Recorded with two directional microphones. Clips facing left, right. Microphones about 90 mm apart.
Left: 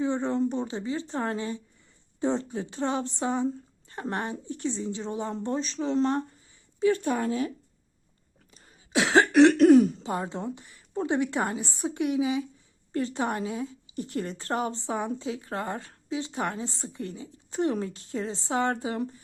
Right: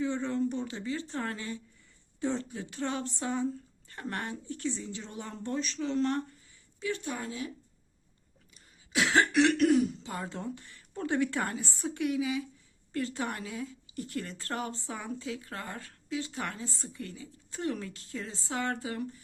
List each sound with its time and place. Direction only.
0.0 s speech: 25° left (ahead or behind)
6.7 s speech: 40° left (ahead or behind)
8.5 s a sound: 25° left (ahead or behind)
9.3 s speech: 35° left (ahead or behind)